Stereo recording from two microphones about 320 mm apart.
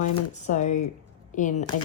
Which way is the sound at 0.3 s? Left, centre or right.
Left.